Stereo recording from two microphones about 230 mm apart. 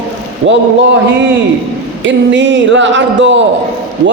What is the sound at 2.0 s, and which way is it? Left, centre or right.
A man's voice, right.